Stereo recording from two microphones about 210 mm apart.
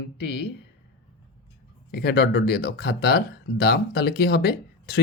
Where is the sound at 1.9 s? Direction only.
50° left (ahead or behind).